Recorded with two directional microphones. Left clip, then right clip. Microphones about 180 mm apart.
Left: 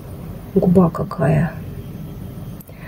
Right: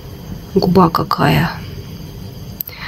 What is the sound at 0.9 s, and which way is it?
Speech, 20° right (ahead or behind).